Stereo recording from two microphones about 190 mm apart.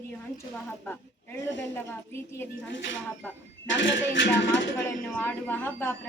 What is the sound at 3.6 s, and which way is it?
Speech, 75° left (ahead or behind).